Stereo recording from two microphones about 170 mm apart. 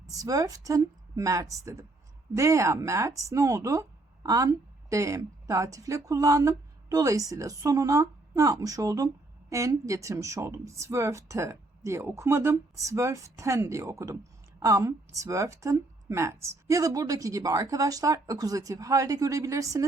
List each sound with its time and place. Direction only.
0.0 s a woman's voice: 20° right (ahead or behind)